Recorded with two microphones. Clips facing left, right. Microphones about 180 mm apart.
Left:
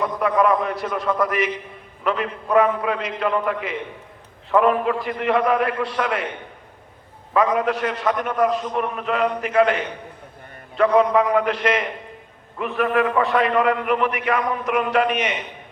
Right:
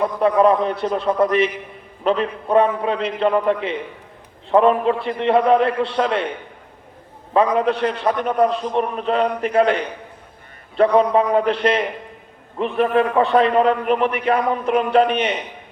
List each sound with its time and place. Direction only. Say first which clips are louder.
0.0 s a man's voice: right 4 dB; 30° right (ahead or behind)
7.3 s a man's voice: right 3 dB; 30° right (ahead or behind)